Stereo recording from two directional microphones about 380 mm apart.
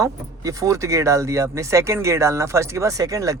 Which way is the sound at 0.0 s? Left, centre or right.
Centre.